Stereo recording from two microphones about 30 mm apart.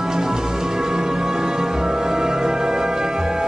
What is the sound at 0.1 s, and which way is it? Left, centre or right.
Music, right.